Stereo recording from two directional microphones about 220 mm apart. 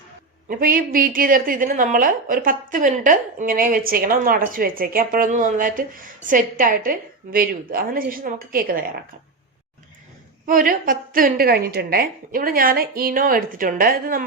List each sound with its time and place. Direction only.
0.4 s a woman's voice: 40° right (ahead or behind)
10.4 s a woman's voice: 40° right (ahead or behind)